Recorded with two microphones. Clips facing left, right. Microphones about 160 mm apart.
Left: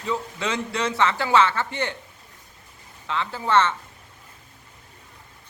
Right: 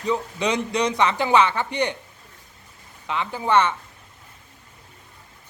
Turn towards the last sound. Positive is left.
turn(degrees=-15)  # may be behind; listen again after turning